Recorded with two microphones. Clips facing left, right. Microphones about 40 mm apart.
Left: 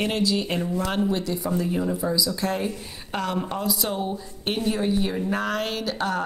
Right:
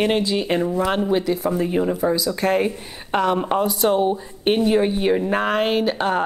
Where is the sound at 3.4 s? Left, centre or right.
Right.